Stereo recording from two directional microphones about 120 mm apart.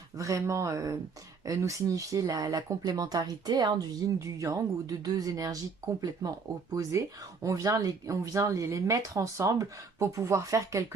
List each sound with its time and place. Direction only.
0.2 s speech: 25° right (ahead or behind)
7.4 s speech: 30° right (ahead or behind)